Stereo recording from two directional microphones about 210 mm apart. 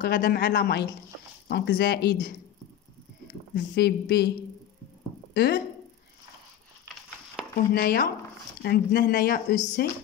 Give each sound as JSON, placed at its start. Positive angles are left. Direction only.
{"t": 0.0, "sound": "speech", "side_deg": 45}
{"t": 3.5, "sound": "speech", "side_deg": 55}
{"t": 5.3, "sound": "speech", "side_deg": 50}
{"t": 7.7, "sound": "speech", "side_deg": 45}